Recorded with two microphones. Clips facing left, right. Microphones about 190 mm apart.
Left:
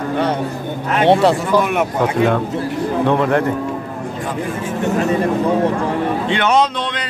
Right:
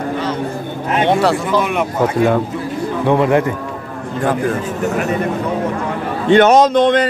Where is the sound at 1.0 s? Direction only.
30° left (ahead or behind).